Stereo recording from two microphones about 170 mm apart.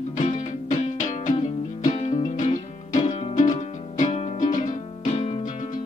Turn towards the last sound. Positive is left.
turn(degrees=40)  # may be behind; listen again after turning